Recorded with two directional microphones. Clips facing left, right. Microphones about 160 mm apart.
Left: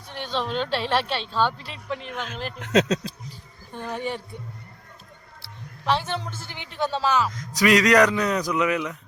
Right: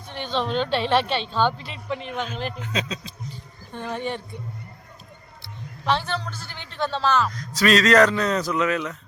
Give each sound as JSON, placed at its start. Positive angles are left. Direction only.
{"t": 0.1, "sound": "a woman's voice", "side_deg": 5}
{"t": 2.6, "sound": "speech", "side_deg": 75}
{"t": 3.7, "sound": "speech", "side_deg": 10}
{"t": 5.4, "sound": "a sound", "side_deg": 5}
{"t": 6.0, "sound": "speech", "side_deg": 20}